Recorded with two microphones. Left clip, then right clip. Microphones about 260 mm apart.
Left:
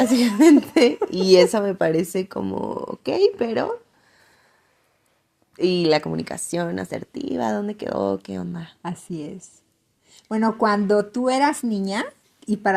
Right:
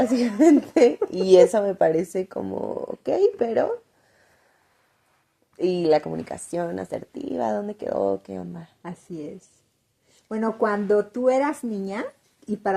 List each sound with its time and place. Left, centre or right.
0.0 s speech: left
5.5 s speech: left